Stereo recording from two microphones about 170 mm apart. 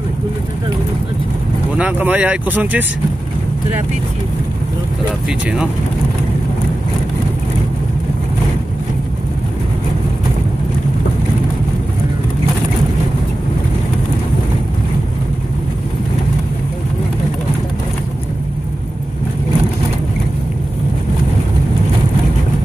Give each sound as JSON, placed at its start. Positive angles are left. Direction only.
{"t": 1.8, "sound": "speech", "side_deg": -10}